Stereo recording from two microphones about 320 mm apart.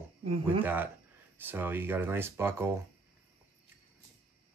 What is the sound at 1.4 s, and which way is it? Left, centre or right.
Speech, centre.